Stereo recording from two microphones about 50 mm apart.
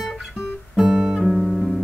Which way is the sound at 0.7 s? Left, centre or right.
Centre.